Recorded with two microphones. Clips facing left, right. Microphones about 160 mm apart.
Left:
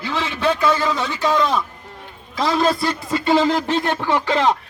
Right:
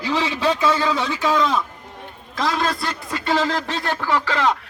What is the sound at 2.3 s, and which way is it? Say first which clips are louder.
Speech: left 4 dB; 5° left (ahead or behind).